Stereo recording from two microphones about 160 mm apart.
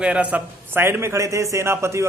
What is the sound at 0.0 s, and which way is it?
A man's voice, 10° right (ahead or behind).